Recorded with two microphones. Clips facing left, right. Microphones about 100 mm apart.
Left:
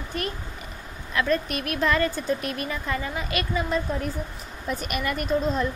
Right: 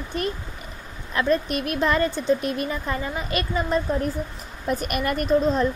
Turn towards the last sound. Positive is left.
turn(degrees=-45)  # may be behind; listen again after turning